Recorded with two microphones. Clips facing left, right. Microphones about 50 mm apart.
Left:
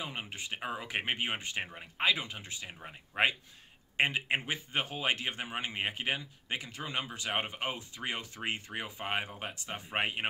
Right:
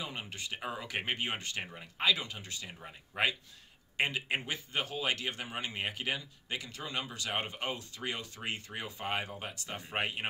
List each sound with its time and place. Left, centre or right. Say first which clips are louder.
0.0 s speech: left 1 dB; left